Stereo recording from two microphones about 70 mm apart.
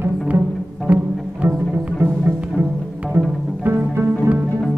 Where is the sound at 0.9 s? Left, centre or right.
Right.